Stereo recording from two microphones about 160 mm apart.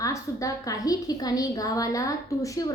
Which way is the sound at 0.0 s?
20° left (ahead or behind).